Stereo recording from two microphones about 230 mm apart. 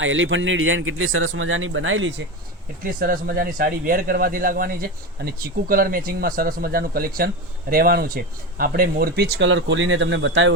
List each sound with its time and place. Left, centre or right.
0.0 s a man's voice: right
2.8 s speech: right